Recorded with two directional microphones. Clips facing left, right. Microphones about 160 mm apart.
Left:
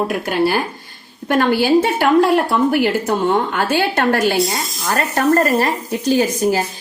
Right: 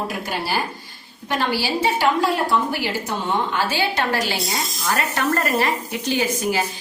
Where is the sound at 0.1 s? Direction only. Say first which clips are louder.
Left 8 dB; 55° left (ahead or behind).